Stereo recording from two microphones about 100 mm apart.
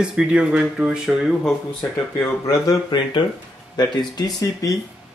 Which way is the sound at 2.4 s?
35° left (ahead or behind).